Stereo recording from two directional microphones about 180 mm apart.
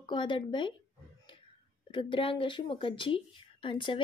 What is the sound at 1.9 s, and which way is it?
Speech, 30° left (ahead or behind).